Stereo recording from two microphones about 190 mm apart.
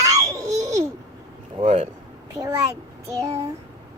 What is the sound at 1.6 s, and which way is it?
Speech, 30° right (ahead or behind).